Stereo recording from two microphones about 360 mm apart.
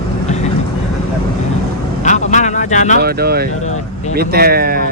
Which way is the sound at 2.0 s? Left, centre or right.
Centre.